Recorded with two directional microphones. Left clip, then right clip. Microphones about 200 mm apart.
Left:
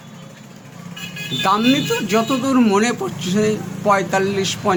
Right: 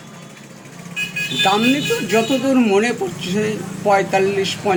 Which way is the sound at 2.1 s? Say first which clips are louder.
Right 2 dB; 50° left (ahead or behind).